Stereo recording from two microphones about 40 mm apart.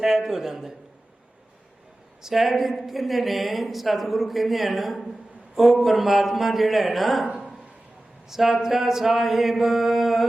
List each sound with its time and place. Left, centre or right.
0.0 s a man's voice: centre
2.2 s a woman's voice: centre
8.3 s a woman's voice: centre